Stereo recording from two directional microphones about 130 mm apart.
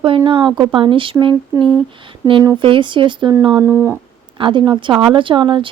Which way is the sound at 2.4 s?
40° right (ahead or behind).